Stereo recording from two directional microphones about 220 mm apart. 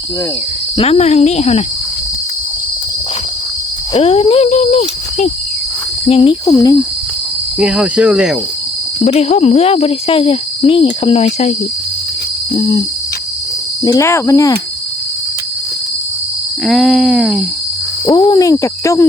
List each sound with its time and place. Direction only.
0.8 s speech: 30° left (ahead or behind)
3.9 s cricket: 25° left (ahead or behind)
6.1 s hoot: 25° left (ahead or behind)
7.6 s cricket: 5° right (ahead or behind)
9.0 s speech: 30° left (ahead or behind)
12.5 s speech: 20° left (ahead or behind)
13.8 s hoot: 15° left (ahead or behind)
16.6 s cricket: centre (ahead or behind)
18.0 s hoot: 15° left (ahead or behind)